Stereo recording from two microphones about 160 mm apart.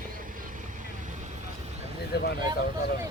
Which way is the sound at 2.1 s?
90° left.